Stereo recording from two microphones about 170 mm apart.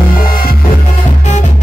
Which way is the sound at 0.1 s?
55° left (ahead or behind).